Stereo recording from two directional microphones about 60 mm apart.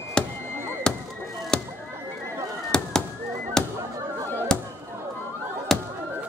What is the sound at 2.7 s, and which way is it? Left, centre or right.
Fireworks, centre.